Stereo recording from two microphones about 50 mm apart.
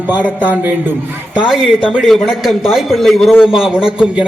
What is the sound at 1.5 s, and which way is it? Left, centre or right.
Speech, centre.